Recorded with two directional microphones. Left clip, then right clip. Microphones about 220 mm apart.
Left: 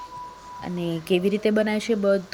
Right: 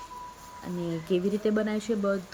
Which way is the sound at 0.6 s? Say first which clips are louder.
Left 5 dB; 10° left (ahead or behind).